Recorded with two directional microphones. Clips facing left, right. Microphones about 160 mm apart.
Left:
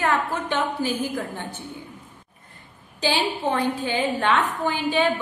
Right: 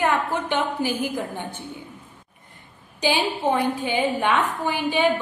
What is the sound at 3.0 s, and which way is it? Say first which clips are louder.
A woman's voice: right 1 dB; 15° right (ahead or behind).